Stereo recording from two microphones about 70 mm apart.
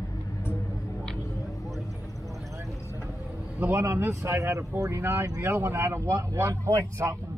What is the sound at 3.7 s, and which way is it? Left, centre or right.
Vehicle, right.